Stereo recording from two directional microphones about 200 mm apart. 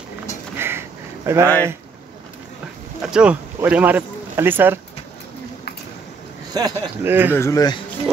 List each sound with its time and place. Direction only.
0.6 s a sound: 10° right (ahead or behind)
3.0 s speech: 5° right (ahead or behind)
6.5 s speech: 15° right (ahead or behind)
7.3 s speech: 15° left (ahead or behind)